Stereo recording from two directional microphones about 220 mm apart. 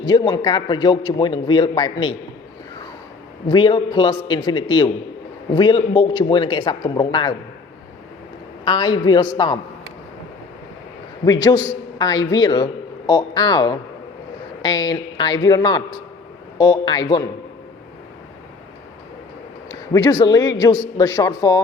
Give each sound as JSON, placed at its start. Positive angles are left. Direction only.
{"t": 0.0, "sound": "a man's voice", "side_deg": 20}
{"t": 3.5, "sound": "a man's voice", "side_deg": 20}
{"t": 8.6, "sound": "a man's voice", "side_deg": 20}
{"t": 11.3, "sound": "a man's voice", "side_deg": 15}
{"t": 19.6, "sound": "speech", "side_deg": 15}